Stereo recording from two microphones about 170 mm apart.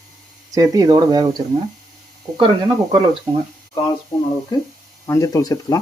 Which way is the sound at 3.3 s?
25° right (ahead or behind).